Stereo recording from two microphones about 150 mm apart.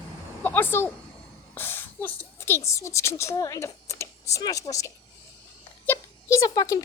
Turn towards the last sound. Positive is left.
turn(degrees=25)  # may be behind; listen again after turning